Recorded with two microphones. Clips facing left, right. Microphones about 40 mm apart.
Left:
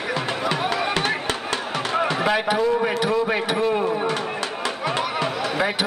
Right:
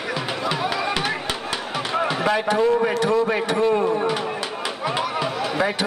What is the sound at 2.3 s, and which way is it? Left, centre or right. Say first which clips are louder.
Speech: even; left.